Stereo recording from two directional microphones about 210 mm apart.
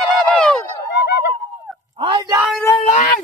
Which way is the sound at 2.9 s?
35° left (ahead or behind).